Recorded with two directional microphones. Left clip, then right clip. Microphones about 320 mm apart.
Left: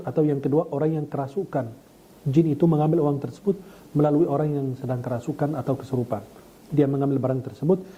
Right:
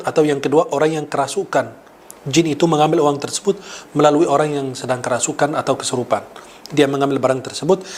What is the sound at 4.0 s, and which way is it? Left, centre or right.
Speech, centre.